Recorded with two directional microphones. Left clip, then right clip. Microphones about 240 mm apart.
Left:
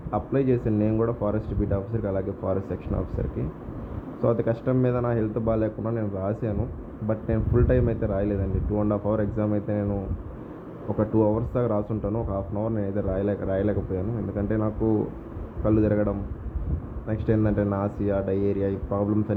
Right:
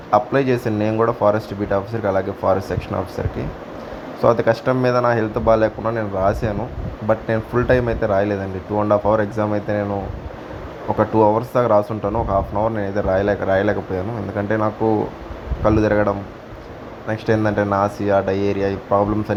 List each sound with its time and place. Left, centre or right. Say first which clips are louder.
0.1 s speech: right 8 dB; centre
4.2 s speech: right 9 dB; centre
10.9 s speech: right 8 dB; centre